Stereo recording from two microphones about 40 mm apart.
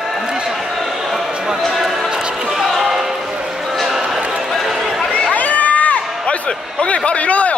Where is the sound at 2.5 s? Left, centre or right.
Centre.